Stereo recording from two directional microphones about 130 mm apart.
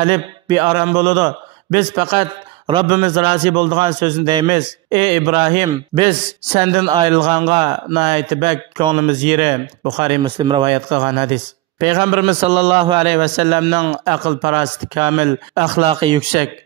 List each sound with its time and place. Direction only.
0.0 s a man's voice: 35° right (ahead or behind)